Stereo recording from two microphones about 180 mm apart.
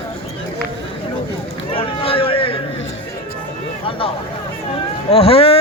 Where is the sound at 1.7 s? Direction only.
30° left (ahead or behind).